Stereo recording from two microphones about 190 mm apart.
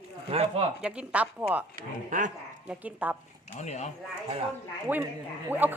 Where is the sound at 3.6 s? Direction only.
35° left (ahead or behind).